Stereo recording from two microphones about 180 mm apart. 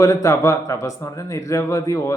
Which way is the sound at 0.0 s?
15° left (ahead or behind).